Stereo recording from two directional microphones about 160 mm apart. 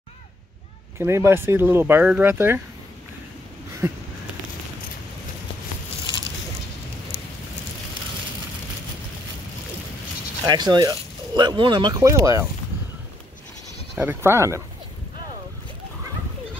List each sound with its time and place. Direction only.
0.9 s speech: 15° right (ahead or behind)
3.8 s speech: 15° right (ahead or behind)
10.4 s speech: 25° right (ahead or behind)
13.9 s speech: 15° right (ahead or behind)